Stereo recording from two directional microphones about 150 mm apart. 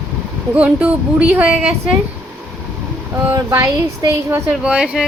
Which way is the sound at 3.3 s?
20° right (ahead or behind).